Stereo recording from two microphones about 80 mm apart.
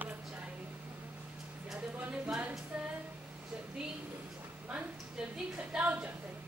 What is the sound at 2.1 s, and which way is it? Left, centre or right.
Speech, centre.